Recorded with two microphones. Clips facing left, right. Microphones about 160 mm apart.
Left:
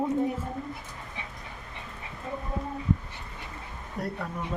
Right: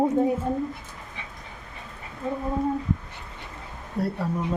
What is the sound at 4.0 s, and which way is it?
Speech, 30° right (ahead or behind).